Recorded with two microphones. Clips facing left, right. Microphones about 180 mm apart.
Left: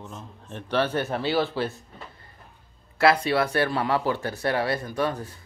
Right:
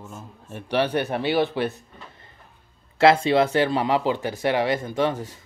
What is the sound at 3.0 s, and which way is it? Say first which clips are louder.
Speech: right 4 dB; 25° right (ahead or behind).